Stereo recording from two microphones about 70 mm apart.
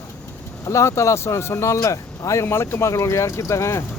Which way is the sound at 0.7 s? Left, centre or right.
Left.